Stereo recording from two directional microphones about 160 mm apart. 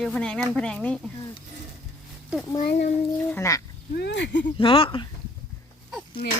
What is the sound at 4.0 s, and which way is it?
Speech, 90° left.